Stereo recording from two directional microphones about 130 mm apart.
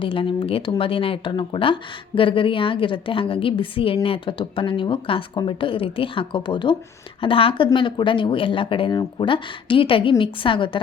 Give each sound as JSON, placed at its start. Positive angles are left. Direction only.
{"t": 0.0, "sound": "speech", "side_deg": 40}